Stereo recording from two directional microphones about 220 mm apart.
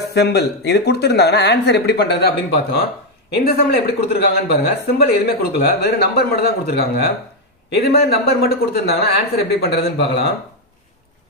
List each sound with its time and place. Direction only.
0.1 s speech: 50° left (ahead or behind)